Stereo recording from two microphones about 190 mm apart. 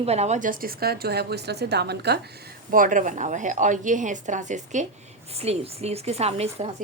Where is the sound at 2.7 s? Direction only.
45° right (ahead or behind).